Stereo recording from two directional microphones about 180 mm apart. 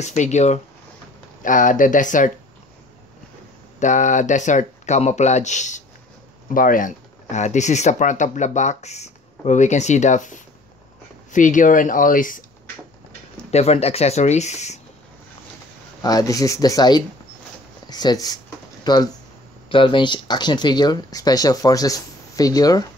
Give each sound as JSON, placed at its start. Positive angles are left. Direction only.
{"t": 0.0, "sound": "speech", "side_deg": 40}
{"t": 3.8, "sound": "speech", "side_deg": 45}
{"t": 13.5, "sound": "speech", "side_deg": 35}
{"t": 16.0, "sound": "speech", "side_deg": 20}